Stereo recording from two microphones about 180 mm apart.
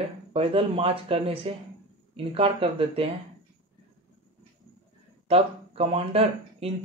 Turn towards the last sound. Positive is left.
turn(degrees=-35)  # may be behind; listen again after turning